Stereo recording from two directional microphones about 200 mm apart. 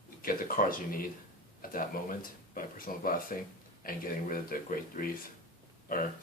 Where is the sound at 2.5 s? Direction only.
45° left (ahead or behind).